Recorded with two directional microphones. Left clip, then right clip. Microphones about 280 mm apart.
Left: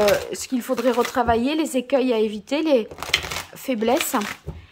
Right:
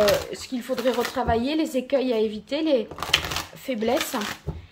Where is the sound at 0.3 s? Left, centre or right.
Centre.